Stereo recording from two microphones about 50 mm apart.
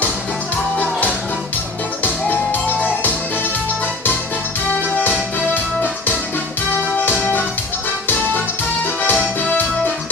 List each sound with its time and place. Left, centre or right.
2.0 s music: left
4.9 s music: left
7.0 s music: left
9.0 s music: left